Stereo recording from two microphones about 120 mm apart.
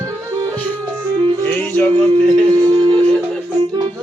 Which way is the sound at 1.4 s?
15° left (ahead or behind).